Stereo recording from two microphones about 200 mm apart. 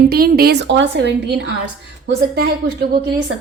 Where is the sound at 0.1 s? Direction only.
50° right (ahead or behind).